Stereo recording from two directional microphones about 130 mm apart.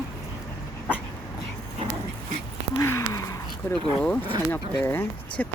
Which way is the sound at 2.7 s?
20° left (ahead or behind).